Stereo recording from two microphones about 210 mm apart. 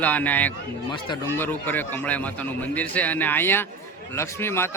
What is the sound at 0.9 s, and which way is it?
Speech, 20° left (ahead or behind).